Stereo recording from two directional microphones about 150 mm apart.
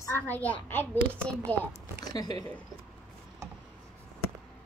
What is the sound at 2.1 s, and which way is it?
Speech, 25° left (ahead or behind).